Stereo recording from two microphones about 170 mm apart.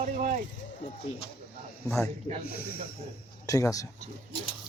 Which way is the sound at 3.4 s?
20° left (ahead or behind).